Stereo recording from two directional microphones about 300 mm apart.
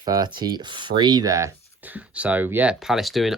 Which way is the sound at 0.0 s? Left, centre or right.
Centre.